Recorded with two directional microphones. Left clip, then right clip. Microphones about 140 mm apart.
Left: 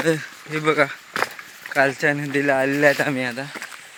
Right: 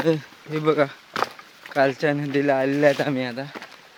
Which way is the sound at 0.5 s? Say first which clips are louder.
Left 1 dB; 20° right (ahead or behind).